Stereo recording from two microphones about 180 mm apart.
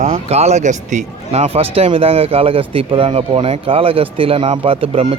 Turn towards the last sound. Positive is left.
turn(degrees=-30)  # may be behind; listen again after turning